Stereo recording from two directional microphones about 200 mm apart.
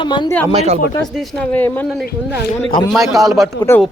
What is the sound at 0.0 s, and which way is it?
Speech, 25° left (ahead or behind).